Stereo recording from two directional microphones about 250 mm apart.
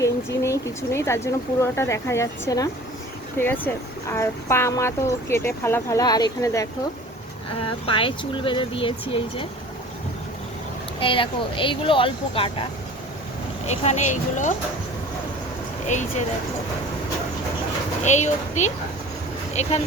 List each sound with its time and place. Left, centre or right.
0.0 s speech: centre
11.0 s speech: left
13.7 s speech: left
18.0 s speech: left